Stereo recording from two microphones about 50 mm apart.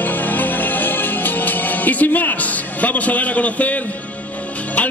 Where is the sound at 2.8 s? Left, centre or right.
Left.